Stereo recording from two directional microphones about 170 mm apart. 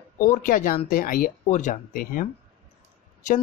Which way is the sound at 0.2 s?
50° left (ahead or behind).